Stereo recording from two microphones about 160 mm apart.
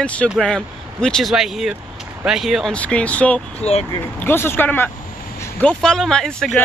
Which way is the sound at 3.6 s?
40° left (ahead or behind).